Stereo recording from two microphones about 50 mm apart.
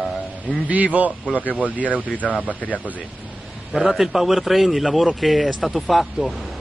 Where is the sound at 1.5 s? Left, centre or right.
Left.